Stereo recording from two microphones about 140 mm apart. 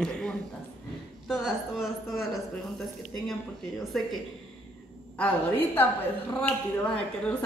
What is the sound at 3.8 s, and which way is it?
Speech, centre (ahead or behind).